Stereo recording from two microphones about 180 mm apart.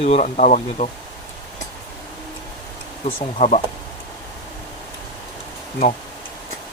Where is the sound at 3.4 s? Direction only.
40° left (ahead or behind).